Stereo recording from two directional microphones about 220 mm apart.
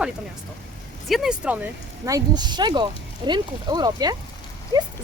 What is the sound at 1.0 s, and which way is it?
Speech, centre (ahead or behind).